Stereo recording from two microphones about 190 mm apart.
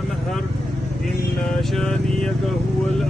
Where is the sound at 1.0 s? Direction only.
Centre (ahead or behind).